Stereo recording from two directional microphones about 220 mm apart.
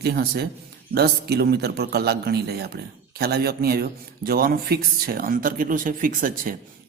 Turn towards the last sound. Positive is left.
turn(degrees=-40)  # may be behind; listen again after turning